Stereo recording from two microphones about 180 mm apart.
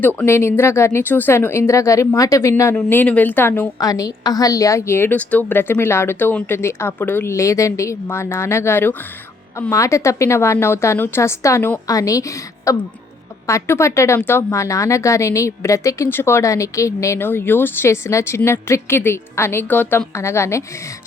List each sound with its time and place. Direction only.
0.0 s speech: 10° left (ahead or behind)